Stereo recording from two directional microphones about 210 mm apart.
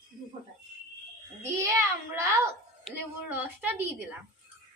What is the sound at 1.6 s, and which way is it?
Speech, 15° right (ahead or behind).